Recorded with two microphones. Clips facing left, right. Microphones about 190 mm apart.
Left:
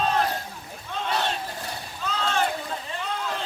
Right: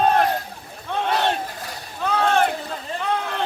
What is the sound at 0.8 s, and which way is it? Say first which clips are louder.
Crowd: right 6 dB; 60° right (ahead or behind).